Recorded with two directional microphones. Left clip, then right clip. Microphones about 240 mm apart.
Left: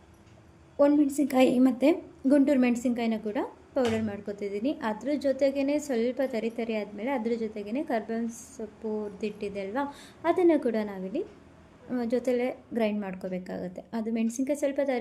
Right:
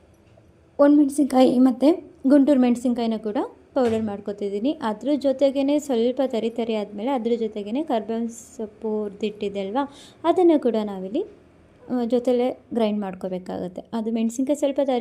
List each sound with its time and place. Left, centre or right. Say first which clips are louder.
0.8 s a woman's voice: right 6 dB; centre